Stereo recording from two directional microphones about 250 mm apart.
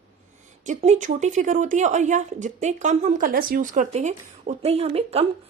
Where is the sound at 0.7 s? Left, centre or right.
Right.